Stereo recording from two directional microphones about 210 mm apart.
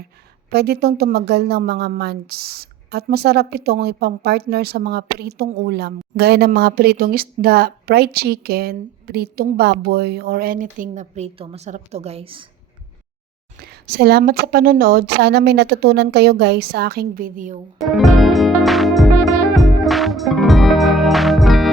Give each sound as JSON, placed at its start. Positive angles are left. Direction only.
{"t": 0.5, "sound": "a woman's voice", "side_deg": -50}
{"t": 13.6, "sound": "a woman's voice", "side_deg": -50}
{"t": 17.8, "sound": "music", "side_deg": 0}